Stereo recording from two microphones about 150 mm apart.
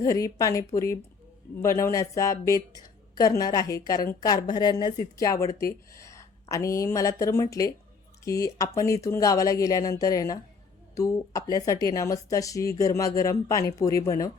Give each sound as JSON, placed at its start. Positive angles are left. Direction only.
{"t": 0.0, "sound": "a woman's voice", "side_deg": 20}